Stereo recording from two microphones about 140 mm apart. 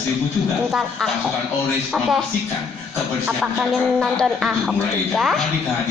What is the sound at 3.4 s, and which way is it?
A man's voice, 5° right (ahead or behind).